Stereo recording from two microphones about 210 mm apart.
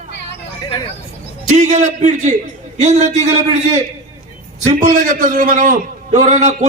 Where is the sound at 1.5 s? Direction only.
35° right (ahead or behind).